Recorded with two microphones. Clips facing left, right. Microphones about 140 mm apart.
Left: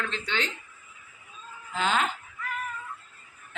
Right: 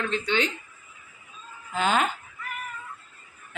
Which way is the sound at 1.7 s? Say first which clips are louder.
Right 3 dB; 50° right (ahead or behind).